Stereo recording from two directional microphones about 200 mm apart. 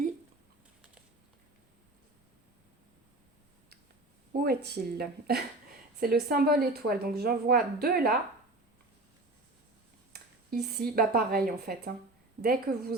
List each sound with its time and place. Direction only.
4.3 s speech: 50° right (ahead or behind)
10.1 s speech: 50° right (ahead or behind)